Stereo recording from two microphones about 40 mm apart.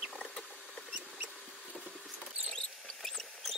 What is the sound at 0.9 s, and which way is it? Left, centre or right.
Rodents, right.